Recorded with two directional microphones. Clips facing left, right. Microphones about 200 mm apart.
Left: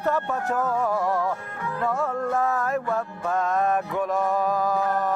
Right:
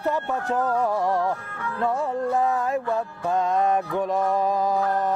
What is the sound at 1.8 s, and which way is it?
Music, 15° right (ahead or behind).